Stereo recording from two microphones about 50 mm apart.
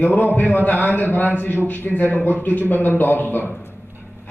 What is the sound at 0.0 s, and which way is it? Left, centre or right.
A man's voice, left.